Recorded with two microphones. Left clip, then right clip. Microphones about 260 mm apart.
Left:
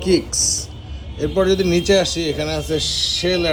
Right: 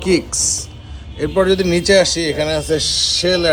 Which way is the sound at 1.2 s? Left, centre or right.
Right.